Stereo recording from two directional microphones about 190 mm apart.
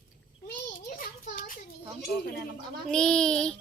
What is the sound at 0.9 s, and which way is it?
Child singing, 45° left (ahead or behind).